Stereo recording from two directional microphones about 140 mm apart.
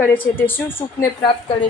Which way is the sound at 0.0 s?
15° left (ahead or behind).